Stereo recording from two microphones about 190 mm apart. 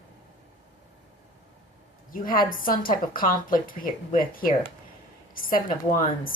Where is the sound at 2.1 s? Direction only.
45° left (ahead or behind).